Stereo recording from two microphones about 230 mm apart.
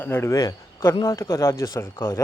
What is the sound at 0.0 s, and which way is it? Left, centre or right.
Speech, centre.